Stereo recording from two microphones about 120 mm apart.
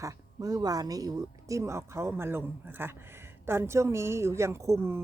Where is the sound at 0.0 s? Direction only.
30° right (ahead or behind).